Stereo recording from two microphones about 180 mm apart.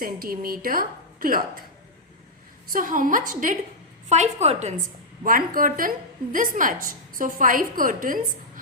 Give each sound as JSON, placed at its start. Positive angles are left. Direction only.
{"t": 0.0, "sound": "a woman's voice", "side_deg": -55}
{"t": 2.6, "sound": "a woman's voice", "side_deg": -50}
{"t": 5.2, "sound": "a woman's voice", "side_deg": -50}